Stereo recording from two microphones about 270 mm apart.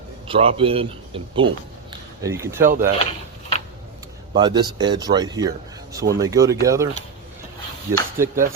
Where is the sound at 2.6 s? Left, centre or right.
Right.